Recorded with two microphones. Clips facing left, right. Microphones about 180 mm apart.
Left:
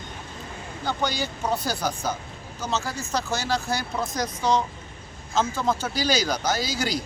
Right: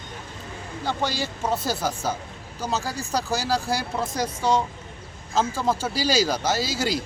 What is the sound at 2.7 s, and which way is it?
Speech, 35° right (ahead or behind).